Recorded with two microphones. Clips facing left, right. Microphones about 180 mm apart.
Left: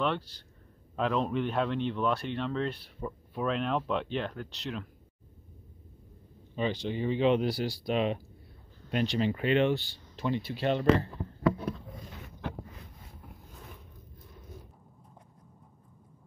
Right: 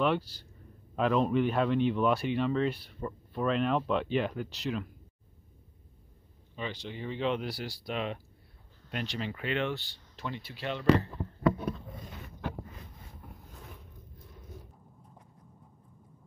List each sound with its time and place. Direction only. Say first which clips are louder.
0.0 s speech: right 3 dB; 5° right (ahead or behind)
6.5 s speech: left 7 dB; 25° left (ahead or behind)
10.7 s speech: left 1 dB; 35° left (ahead or behind)